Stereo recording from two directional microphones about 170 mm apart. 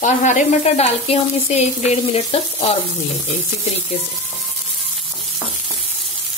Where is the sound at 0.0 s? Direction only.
45° left (ahead or behind).